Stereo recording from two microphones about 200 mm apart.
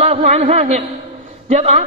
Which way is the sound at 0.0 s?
30° right (ahead or behind).